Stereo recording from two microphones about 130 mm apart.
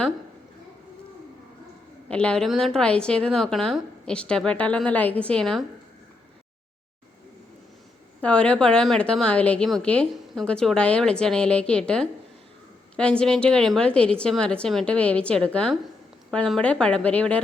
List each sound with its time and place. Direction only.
2.0 s a woman's voice: 10° left (ahead or behind)
8.2 s a woman's voice: 10° left (ahead or behind)